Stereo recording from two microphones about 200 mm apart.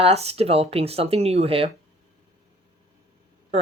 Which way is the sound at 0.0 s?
30° right (ahead or behind).